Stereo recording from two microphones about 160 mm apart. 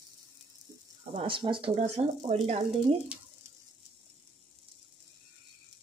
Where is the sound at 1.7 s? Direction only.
45° right (ahead or behind).